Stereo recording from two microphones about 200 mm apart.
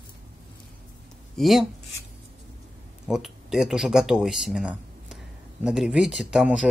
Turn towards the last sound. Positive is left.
turn(degrees=-5)  # may be behind; listen again after turning